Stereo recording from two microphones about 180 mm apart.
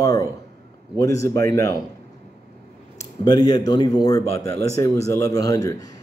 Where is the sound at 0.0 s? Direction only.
20° left (ahead or behind).